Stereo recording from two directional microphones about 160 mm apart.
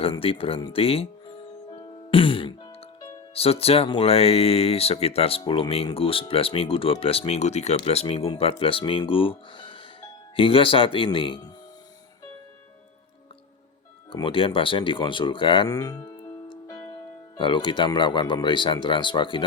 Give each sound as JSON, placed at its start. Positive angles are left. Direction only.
{"t": 0.0, "sound": "speech", "side_deg": 35}
{"t": 1.7, "sound": "music", "side_deg": 35}
{"t": 3.3, "sound": "speech", "side_deg": 40}
{"t": 14.1, "sound": "speech", "side_deg": 30}
{"t": 17.3, "sound": "speech", "side_deg": 30}